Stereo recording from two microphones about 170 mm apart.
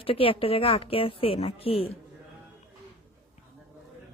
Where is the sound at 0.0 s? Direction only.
35° left (ahead or behind).